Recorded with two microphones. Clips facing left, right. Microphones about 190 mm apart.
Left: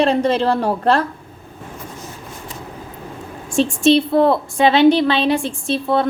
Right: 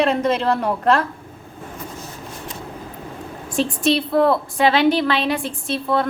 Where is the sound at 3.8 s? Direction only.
25° left (ahead or behind).